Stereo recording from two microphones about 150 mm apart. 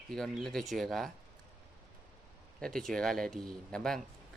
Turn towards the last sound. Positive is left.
turn(degrees=5)  # may be behind; listen again after turning